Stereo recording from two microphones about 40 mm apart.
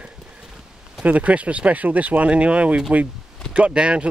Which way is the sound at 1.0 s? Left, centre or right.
Right.